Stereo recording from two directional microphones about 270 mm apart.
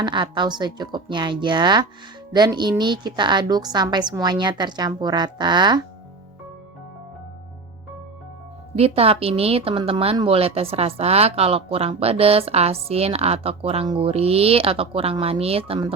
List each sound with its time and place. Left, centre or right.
0.0 s a woman's voice: centre
8.7 s a woman's voice: right